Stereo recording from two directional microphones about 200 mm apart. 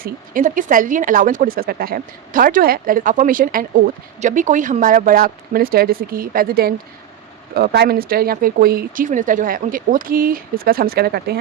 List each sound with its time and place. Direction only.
0.0 s speech: 40° right (ahead or behind)